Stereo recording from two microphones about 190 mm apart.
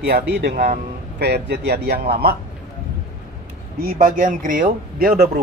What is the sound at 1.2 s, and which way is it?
Speech, 60° right (ahead or behind).